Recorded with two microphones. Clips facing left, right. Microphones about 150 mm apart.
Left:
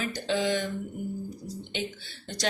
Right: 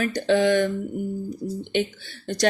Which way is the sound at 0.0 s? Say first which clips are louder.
Right 8 dB; 60° right (ahead or behind).